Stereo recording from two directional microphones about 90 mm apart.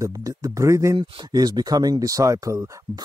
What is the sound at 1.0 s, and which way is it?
Speech, 50° right (ahead or behind).